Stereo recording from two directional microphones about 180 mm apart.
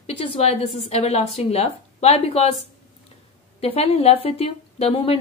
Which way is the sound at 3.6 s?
35° left (ahead or behind).